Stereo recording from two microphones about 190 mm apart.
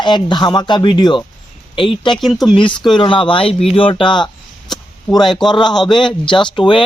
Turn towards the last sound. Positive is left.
turn(degrees=25)  # may be behind; listen again after turning